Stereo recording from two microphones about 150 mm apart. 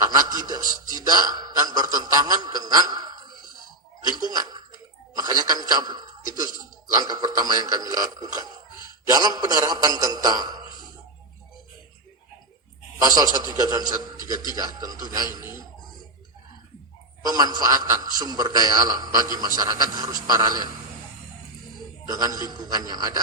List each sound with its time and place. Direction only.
0.1 s a man's voice: 25° right (ahead or behind)
13.4 s a man's voice: 25° right (ahead or behind)
17.2 s a man's voice: 25° right (ahead or behind)
22.1 s a man's voice: 25° right (ahead or behind)